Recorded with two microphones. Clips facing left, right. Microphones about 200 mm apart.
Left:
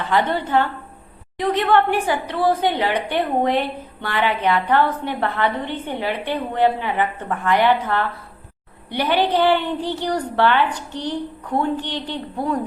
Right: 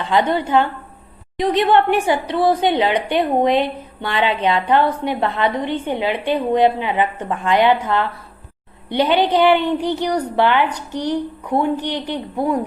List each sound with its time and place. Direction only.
0.0 s a woman's voice: 15° right (ahead or behind)
1.7 s a woman's voice: 15° right (ahead or behind)